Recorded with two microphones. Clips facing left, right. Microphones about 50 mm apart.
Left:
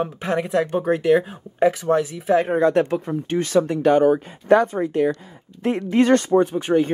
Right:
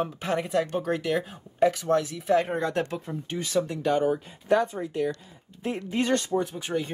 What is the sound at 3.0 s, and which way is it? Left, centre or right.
Speech, left.